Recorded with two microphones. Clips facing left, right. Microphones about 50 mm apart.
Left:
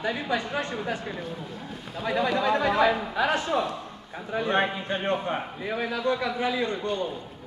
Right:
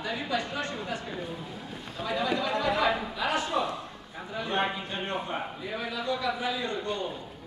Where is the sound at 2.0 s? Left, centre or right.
Left.